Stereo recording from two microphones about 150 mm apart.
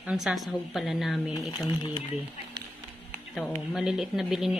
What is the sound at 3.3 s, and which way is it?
A woman's voice, 5° left (ahead or behind).